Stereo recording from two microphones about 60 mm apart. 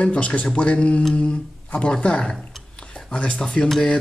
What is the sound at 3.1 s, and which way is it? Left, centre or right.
Speech, centre.